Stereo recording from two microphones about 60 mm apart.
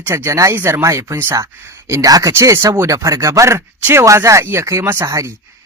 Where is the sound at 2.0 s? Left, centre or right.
Right.